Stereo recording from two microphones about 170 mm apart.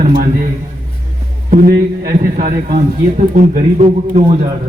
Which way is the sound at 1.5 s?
55° right (ahead or behind).